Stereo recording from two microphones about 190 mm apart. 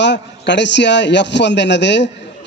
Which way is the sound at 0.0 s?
65° left (ahead or behind).